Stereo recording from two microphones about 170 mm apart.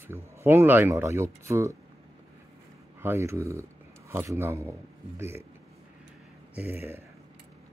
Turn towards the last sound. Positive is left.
turn(degrees=-10)  # may be behind; listen again after turning